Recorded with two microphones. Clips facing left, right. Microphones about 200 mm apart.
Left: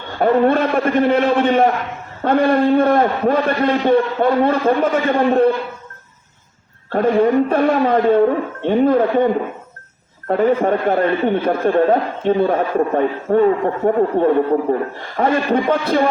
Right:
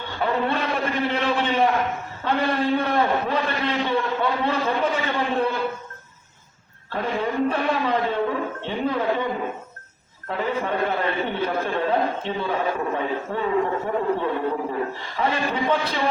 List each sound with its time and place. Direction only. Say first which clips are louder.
0.2 s a sound: left 10 dB; 50° left (ahead or behind)
2.2 s speech: left 9 dB; 50° left (ahead or behind)
6.9 s speech: left 11 dB; 50° left (ahead or behind)
10.2 s speech: left 10 dB; 50° left (ahead or behind)